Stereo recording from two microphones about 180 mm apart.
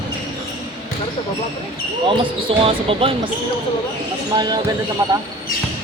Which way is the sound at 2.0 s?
30° right (ahead or behind).